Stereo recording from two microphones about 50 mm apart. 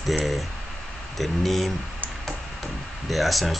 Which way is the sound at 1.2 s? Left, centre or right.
Centre.